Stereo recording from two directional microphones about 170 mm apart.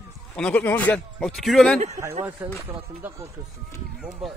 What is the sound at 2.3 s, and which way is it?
Speech, 15° right (ahead or behind).